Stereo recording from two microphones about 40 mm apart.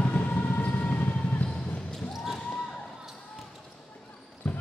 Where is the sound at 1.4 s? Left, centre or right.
Centre.